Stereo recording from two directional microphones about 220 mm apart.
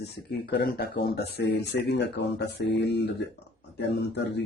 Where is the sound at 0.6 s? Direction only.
45° left (ahead or behind).